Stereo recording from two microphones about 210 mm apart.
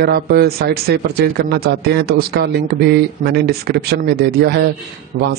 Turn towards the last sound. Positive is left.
turn(degrees=-50)  # may be behind; listen again after turning